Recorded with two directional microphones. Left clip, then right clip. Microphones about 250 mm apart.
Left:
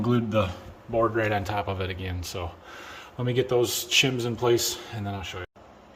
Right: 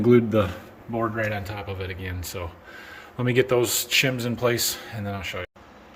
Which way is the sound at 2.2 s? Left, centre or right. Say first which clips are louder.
Even; centre.